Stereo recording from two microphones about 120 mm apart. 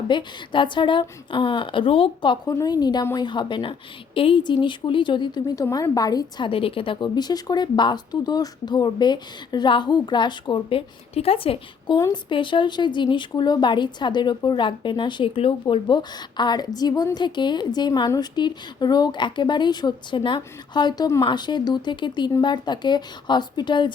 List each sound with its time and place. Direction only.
0.1 s speech: 40° left (ahead or behind)
6.5 s speech: 50° left (ahead or behind)
11.9 s speech: 30° left (ahead or behind)
12.3 s speech: 45° left (ahead or behind)